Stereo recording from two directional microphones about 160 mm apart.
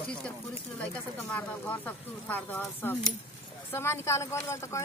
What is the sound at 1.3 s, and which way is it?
Speech, 10° left (ahead or behind).